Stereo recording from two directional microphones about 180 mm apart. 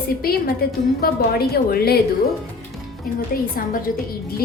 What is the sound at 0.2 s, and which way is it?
A woman's voice, 55° left (ahead or behind).